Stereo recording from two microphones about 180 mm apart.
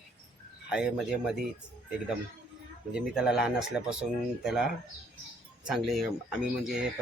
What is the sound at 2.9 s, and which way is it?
Speech, 5° right (ahead or behind).